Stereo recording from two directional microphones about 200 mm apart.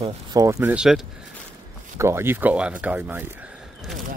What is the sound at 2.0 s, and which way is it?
Speech, 10° right (ahead or behind).